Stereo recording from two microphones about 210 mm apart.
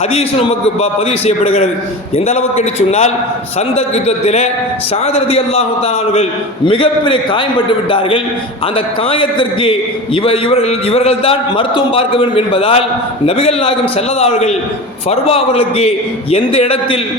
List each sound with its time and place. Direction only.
0.1 s a man's voice: 30° left (ahead or behind)
6.7 s a man's voice: 25° left (ahead or behind)